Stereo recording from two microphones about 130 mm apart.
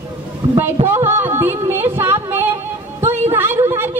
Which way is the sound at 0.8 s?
20° right (ahead or behind).